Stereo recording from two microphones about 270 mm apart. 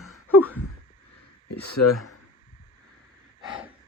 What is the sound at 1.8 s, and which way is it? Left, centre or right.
Speech, left.